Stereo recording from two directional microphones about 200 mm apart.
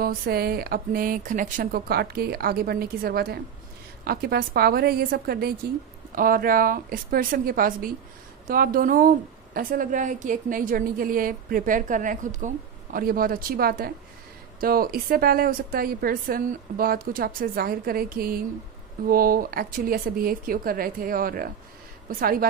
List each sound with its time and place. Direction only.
0.0 s a woman's voice: 50° right (ahead or behind)